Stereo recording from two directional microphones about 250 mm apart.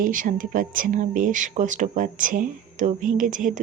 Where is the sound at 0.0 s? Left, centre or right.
Right.